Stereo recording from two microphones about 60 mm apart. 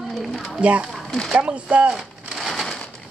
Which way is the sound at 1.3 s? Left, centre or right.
Right.